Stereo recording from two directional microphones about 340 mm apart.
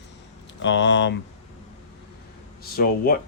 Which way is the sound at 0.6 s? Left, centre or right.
Left.